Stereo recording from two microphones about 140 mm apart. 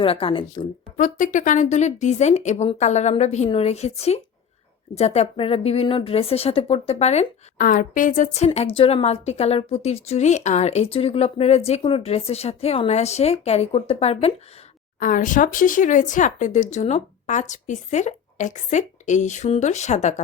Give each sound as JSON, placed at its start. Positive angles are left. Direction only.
{"t": 0.0, "sound": "a woman's voice", "side_deg": 40}
{"t": 0.9, "sound": "a woman's voice", "side_deg": 65}
{"t": 7.6, "sound": "a woman's voice", "side_deg": 70}
{"t": 8.4, "sound": "a woman's voice", "side_deg": 40}
{"t": 14.9, "sound": "speech", "side_deg": 70}